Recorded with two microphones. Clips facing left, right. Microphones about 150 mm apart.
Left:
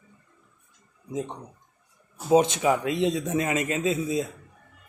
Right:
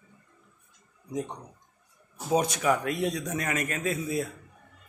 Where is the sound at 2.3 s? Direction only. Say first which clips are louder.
Left 5 dB; 25° left (ahead or behind).